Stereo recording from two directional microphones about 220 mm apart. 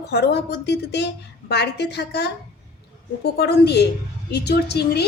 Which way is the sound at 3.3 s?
50° left (ahead or behind).